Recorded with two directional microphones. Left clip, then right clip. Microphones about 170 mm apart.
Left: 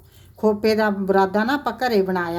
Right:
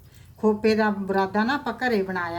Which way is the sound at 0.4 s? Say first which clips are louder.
Left 3 dB; 50° left (ahead or behind).